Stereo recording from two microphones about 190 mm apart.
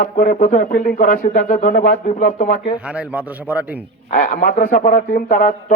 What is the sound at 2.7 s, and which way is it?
A man's voice, 5° right (ahead or behind).